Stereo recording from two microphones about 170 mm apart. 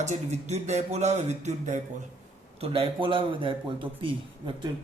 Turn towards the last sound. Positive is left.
turn(degrees=-30)  # may be behind; listen again after turning